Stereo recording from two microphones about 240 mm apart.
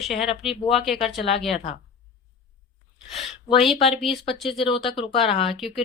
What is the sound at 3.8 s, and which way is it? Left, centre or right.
Speech, left.